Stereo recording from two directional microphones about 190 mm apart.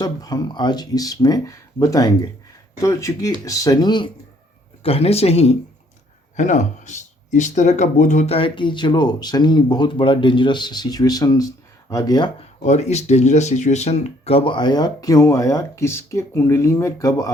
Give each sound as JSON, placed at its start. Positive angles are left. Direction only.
{"t": 0.0, "sound": "speech", "side_deg": 20}
{"t": 12.6, "sound": "speech", "side_deg": 35}